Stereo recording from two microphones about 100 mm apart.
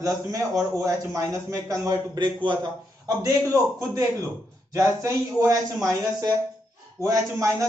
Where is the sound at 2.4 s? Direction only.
55° right (ahead or behind).